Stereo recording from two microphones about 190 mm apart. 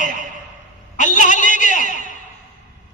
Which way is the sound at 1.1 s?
40° left (ahead or behind).